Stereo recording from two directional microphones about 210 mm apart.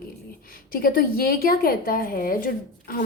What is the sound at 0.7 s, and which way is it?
A woman's voice, 45° left (ahead or behind).